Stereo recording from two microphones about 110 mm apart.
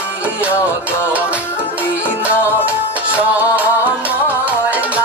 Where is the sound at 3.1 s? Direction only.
15° right (ahead or behind).